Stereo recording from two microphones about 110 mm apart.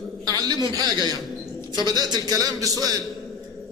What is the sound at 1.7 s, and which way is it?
A man's voice, 40° right (ahead or behind).